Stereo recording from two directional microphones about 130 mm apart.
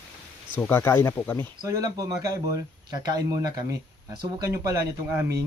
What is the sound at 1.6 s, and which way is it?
Speech, 25° right (ahead or behind).